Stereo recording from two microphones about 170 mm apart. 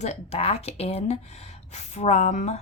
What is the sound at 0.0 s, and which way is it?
Speech, 40° left (ahead or behind).